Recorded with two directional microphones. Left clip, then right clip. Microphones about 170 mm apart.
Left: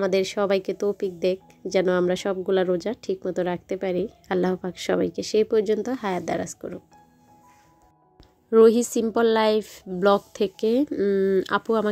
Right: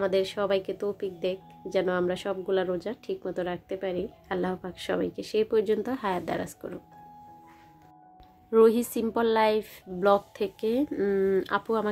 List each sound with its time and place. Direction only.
0.0 s speech: 35° left (ahead or behind)
8.5 s speech: 35° left (ahead or behind)
10.9 s speech: 25° left (ahead or behind)